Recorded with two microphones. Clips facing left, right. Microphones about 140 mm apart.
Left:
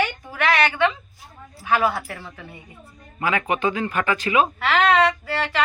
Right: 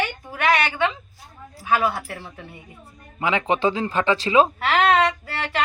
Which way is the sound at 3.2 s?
20° right (ahead or behind).